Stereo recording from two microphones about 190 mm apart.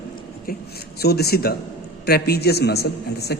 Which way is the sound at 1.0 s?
55° left (ahead or behind).